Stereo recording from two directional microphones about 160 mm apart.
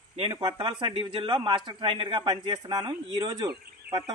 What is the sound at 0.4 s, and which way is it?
A man's voice, 35° right (ahead or behind).